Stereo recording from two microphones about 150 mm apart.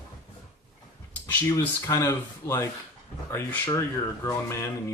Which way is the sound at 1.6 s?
20° left (ahead or behind).